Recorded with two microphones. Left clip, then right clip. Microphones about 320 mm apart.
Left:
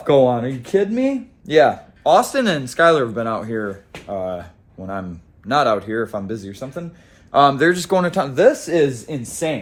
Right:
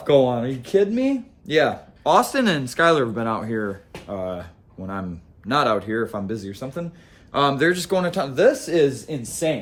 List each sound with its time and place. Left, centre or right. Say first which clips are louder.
0.0 s speech: left 3 dB; centre
2.0 s speech: left 3 dB; centre; by 9.6 s left